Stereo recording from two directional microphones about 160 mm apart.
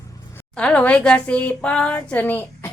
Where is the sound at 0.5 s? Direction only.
5° left (ahead or behind).